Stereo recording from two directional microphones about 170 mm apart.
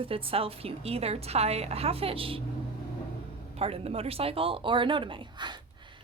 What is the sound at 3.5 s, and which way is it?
A woman's voice, 35° right (ahead or behind).